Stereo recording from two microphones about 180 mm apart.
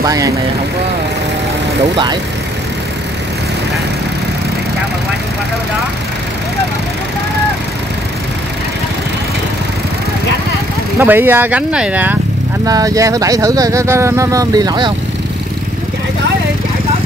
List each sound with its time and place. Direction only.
0.0 s speech: 20° right (ahead or behind)
11.0 s speech: 10° right (ahead or behind)
12.6 s speech: 20° right (ahead or behind)